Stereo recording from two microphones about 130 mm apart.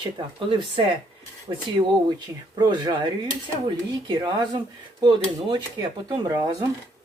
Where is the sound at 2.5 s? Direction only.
35° right (ahead or behind).